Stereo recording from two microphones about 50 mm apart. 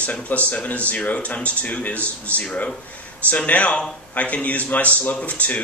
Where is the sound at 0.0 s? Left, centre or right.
Left.